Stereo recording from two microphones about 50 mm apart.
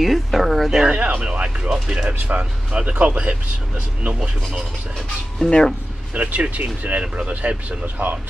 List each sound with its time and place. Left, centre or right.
0.0 s speech: centre
0.9 s speech: right
4.2 s speech: centre
4.9 s speech: centre
6.1 s speech: right
7.8 s speech: right